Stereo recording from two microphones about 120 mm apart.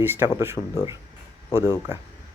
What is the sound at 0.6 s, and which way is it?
Speech, 5° left (ahead or behind).